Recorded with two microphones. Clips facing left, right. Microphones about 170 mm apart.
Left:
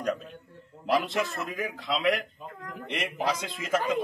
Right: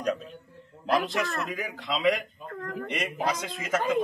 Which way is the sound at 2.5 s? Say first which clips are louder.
Right 4 dB; 55° right (ahead or behind).